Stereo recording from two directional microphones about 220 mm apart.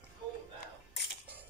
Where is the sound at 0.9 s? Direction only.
55° left (ahead or behind).